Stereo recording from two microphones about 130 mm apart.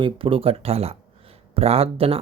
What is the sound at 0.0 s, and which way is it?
Speech, 45° right (ahead or behind).